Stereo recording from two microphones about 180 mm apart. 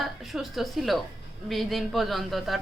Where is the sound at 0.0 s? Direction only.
Centre (ahead or behind).